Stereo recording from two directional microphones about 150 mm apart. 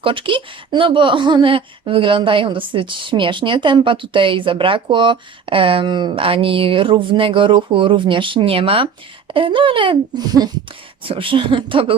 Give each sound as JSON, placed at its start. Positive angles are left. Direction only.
{"t": 0.0, "sound": "speech", "side_deg": -35}